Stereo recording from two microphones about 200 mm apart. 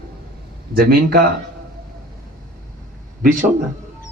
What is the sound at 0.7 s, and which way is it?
Speech, 50° right (ahead or behind).